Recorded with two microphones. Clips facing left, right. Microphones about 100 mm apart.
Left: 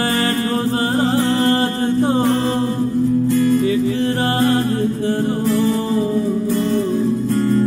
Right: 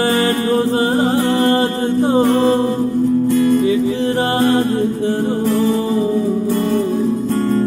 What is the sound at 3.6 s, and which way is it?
Music, 20° right (ahead or behind).